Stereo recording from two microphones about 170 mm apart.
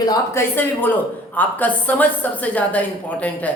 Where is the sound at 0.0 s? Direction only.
20° left (ahead or behind).